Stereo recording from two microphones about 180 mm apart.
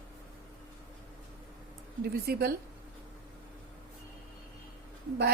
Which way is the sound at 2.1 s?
55° right (ahead or behind).